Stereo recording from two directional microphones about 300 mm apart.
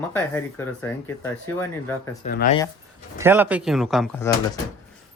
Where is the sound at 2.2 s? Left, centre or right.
Left.